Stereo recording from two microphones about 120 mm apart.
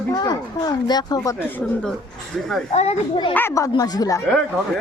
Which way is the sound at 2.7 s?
65° left (ahead or behind).